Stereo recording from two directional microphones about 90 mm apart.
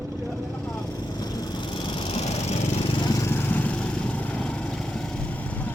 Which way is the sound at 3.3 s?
25° left (ahead or behind).